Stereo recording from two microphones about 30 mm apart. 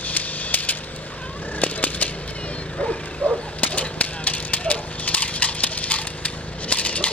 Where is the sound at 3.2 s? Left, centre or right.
Left.